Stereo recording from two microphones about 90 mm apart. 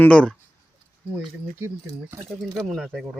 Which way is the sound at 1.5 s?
30° right (ahead or behind).